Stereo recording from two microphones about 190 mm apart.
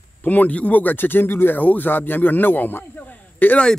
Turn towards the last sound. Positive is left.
turn(degrees=5)  # may be behind; listen again after turning